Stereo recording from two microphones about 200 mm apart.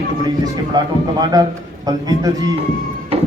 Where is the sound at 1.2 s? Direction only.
20° right (ahead or behind).